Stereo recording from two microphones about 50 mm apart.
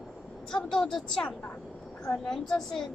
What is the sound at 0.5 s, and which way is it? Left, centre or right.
A woman's voice, centre.